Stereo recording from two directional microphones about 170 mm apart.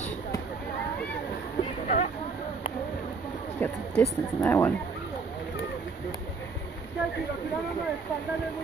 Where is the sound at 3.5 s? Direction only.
10° left (ahead or behind).